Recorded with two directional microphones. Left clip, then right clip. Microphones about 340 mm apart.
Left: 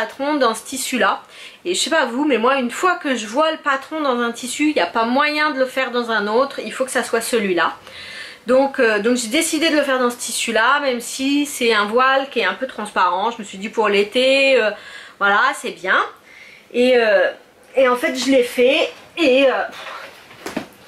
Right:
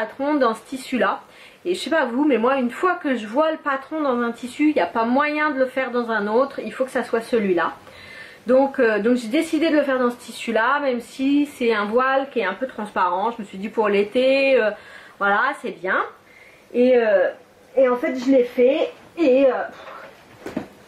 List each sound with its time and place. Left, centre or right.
0.0 s speech: centre
8.2 s a sound: centre
8.7 s speech: centre